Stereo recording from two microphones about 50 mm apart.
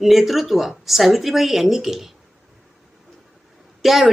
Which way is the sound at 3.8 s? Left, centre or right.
Centre.